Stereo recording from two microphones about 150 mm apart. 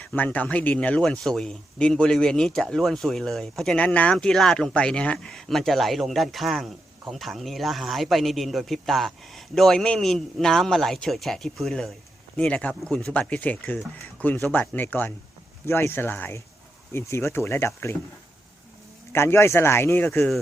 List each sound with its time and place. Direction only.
0.0 s speech: 10° left (ahead or behind)
19.1 s speech: 15° left (ahead or behind)